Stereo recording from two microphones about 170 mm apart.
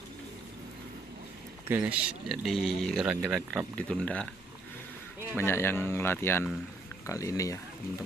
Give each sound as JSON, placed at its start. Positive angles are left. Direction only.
{"t": 1.7, "sound": "speech", "side_deg": -10}
{"t": 3.8, "sound": "speech", "side_deg": 5}
{"t": 5.4, "sound": "speech", "side_deg": 15}